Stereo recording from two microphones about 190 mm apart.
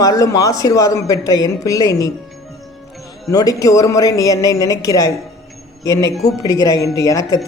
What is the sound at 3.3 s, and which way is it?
Speech, 20° left (ahead or behind).